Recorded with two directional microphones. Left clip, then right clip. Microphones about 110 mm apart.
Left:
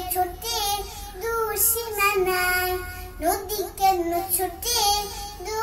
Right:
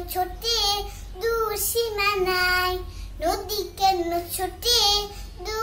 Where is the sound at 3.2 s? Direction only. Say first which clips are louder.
Left 1 dB; 10° right (ahead or behind).